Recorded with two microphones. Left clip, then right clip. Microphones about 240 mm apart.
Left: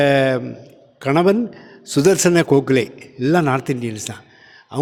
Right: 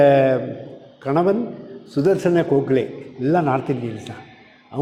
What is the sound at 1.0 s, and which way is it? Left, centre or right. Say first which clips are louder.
A man's voice: left 3 dB; left.